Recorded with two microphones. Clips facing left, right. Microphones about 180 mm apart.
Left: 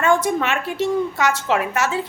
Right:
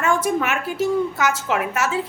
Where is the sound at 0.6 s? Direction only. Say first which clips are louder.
Even; 30° left (ahead or behind).